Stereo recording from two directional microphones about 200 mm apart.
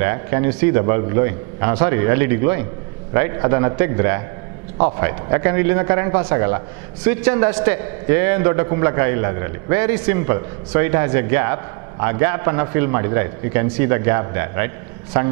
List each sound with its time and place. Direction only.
0.0 s a man's voice: 15° right (ahead or behind)